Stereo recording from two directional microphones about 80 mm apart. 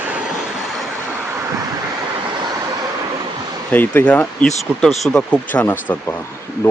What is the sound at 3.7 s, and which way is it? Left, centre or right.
Speech, left.